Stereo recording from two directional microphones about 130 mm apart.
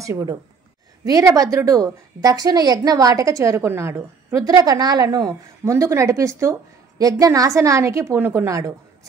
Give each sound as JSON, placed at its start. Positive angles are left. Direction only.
{"t": 0.0, "sound": "a woman's voice", "side_deg": -25}